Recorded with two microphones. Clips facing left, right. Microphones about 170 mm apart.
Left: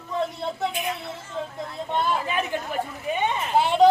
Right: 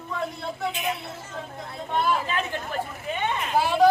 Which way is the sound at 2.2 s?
15° left (ahead or behind).